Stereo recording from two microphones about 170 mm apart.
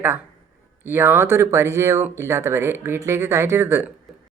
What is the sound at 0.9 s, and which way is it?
A woman's voice, 10° right (ahead or behind).